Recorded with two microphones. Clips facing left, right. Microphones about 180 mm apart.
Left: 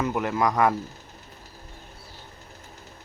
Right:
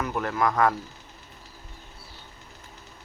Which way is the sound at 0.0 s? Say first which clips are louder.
Left 2 dB; 15° left (ahead or behind).